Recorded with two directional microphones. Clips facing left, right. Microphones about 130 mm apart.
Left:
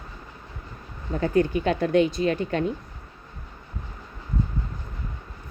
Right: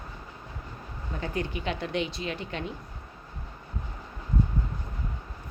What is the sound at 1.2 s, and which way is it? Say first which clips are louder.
Speech: left 10 dB; 45° left (ahead or behind).